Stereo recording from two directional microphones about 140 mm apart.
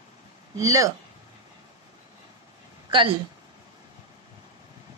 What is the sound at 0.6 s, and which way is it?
Speech, 25° right (ahead or behind).